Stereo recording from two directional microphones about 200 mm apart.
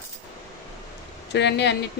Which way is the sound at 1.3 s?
60° left (ahead or behind).